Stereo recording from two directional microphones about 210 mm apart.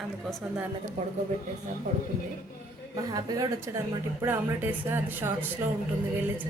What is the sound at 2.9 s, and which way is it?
Speech, 20° right (ahead or behind).